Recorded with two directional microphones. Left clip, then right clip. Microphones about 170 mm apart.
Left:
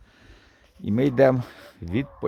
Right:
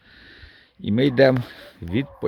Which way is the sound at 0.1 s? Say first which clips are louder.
Right 8 dB; 10° left (ahead or behind).